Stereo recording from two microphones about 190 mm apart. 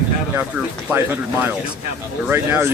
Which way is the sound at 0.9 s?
10° right (ahead or behind).